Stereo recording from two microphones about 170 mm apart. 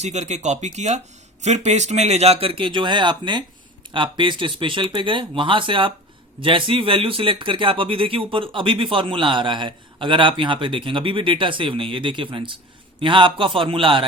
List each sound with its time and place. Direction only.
0.0 s speech: 40° right (ahead or behind)